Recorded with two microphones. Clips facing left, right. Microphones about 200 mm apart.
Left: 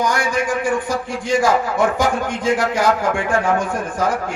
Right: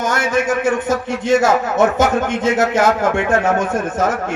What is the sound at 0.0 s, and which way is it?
A man's voice, 25° right (ahead or behind).